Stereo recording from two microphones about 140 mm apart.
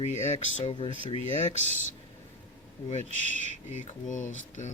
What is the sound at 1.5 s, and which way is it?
Speech, 50° right (ahead or behind).